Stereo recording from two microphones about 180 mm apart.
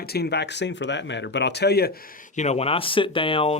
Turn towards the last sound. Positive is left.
turn(degrees=30)  # may be behind; listen again after turning